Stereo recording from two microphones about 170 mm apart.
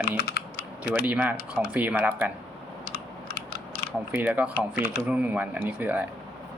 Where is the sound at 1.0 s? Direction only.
10° right (ahead or behind).